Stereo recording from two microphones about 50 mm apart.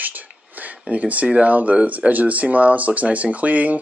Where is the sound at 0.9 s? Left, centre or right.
Right.